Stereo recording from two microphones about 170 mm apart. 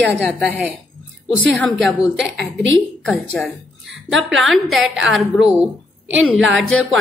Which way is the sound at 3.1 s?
Centre (ahead or behind).